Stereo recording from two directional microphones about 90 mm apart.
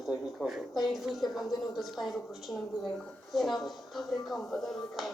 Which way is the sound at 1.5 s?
45° left (ahead or behind).